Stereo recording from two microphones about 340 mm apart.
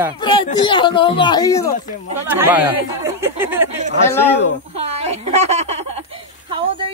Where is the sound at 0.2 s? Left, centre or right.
Centre.